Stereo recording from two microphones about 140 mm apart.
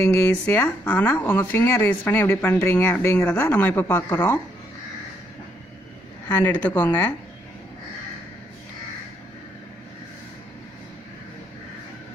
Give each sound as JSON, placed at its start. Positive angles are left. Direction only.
{"t": 0.0, "sound": "speech", "side_deg": 15}
{"t": 6.2, "sound": "speech", "side_deg": 10}